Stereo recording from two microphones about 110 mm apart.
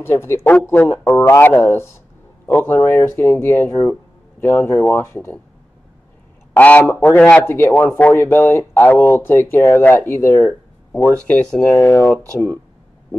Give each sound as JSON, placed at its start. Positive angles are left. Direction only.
{"t": 0.0, "sound": "speech", "side_deg": 20}
{"t": 6.5, "sound": "a man's voice", "side_deg": 15}